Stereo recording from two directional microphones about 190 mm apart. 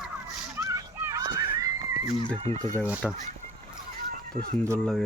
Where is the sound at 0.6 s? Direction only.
15° right (ahead or behind).